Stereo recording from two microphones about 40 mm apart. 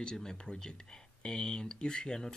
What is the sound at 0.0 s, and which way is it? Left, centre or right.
Speech, centre.